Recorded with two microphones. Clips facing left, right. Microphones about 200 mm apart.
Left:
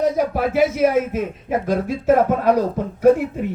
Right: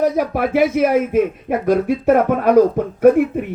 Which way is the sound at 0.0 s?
55° right (ahead or behind).